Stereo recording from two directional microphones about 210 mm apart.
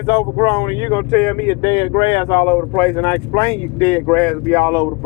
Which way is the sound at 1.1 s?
10° left (ahead or behind).